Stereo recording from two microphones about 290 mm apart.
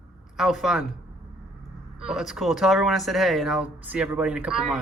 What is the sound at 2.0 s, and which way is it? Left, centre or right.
A woman's voice, centre.